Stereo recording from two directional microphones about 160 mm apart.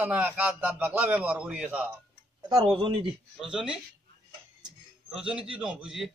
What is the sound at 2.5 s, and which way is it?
Speech, 35° right (ahead or behind).